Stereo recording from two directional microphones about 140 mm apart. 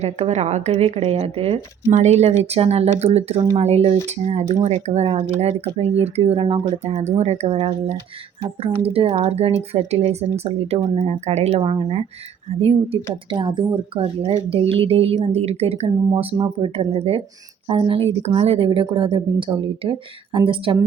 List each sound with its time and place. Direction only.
0.0 s speech: 50° right (ahead or behind)
10.8 s a woman's voice: 30° right (ahead or behind)
11.0 s speech: 55° right (ahead or behind)
11.6 s a woman's voice: 35° right (ahead or behind)
13.3 s a woman's voice: 35° right (ahead or behind)
14.0 s a woman's voice: 45° right (ahead or behind)